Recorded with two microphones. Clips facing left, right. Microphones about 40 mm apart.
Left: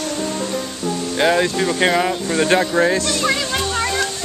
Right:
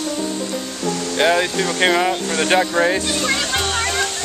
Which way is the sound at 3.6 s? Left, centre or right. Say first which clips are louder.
Even; right.